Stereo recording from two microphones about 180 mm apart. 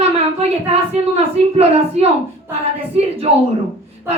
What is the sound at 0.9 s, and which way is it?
A woman's voice, 35° right (ahead or behind).